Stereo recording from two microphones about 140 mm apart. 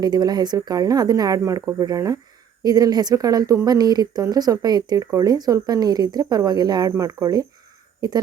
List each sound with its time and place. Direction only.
0.0 s speech: 30° right (ahead or behind)